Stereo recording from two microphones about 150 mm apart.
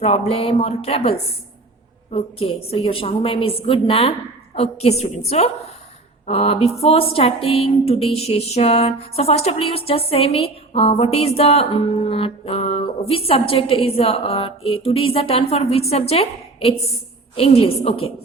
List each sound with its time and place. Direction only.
0.0 s a woman's voice: 40° left (ahead or behind)